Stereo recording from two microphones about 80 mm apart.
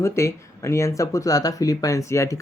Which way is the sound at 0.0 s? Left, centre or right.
Left.